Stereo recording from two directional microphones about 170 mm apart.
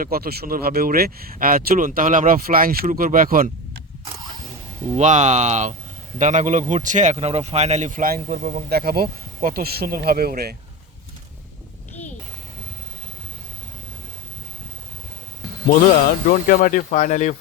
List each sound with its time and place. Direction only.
0.0 s speech: 60° right (ahead or behind)
4.8 s speech: 40° right (ahead or behind); by 10.5 s 65° right (ahead or behind)
16.5 s speech: 50° left (ahead or behind)